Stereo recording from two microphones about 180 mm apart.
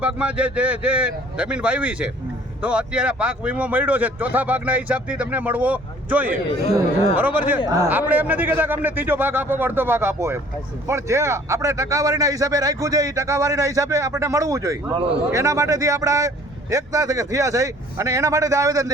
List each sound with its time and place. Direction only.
0.0 s a man's voice: 5° right (ahead or behind)